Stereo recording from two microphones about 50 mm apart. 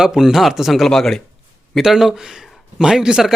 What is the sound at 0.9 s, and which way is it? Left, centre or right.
Speech, centre.